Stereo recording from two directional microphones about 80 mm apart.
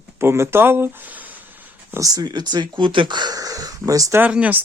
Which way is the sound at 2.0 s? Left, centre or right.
Right.